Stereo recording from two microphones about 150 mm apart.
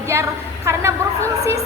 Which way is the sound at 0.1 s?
20° right (ahead or behind).